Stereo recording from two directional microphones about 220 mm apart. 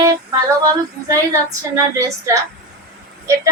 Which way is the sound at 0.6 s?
15° right (ahead or behind).